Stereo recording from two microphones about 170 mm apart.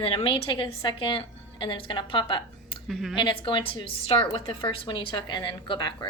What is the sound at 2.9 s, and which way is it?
Speech, centre (ahead or behind).